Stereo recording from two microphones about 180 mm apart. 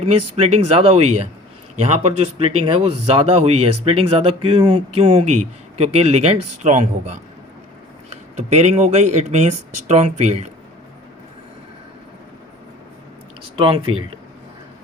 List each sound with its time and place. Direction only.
0.0 s a man's voice: 35° right (ahead or behind)
13.6 s a man's voice: 30° right (ahead or behind)